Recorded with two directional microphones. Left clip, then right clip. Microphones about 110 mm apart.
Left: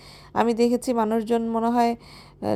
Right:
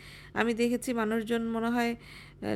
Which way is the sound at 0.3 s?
30° left (ahead or behind).